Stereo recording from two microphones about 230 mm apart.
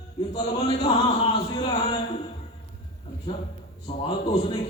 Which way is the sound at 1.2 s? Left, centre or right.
Left.